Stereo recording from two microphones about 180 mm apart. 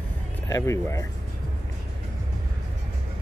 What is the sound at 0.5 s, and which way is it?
Speech, 15° left (ahead or behind).